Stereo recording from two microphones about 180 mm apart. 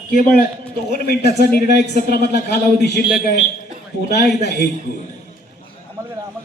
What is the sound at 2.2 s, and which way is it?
Speech, 65° left (ahead or behind).